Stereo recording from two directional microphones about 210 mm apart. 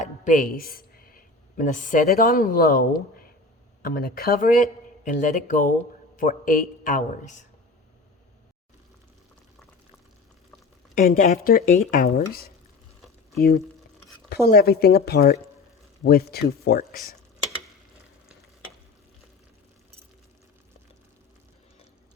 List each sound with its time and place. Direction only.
0.0 s a woman's voice: 40° left (ahead or behind)
10.9 s speech: 40° left (ahead or behind)
14.3 s speech: 50° left (ahead or behind)